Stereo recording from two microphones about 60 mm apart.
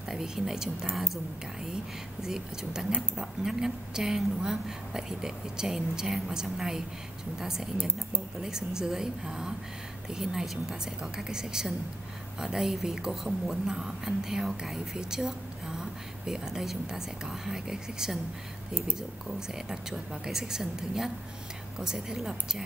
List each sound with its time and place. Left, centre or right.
0.1 s a woman's voice: centre
2.2 s a woman's voice: centre